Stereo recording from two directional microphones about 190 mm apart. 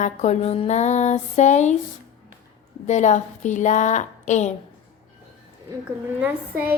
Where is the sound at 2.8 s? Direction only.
40° left (ahead or behind).